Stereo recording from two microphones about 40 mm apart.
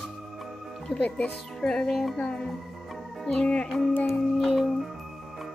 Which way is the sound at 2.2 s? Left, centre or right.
Left.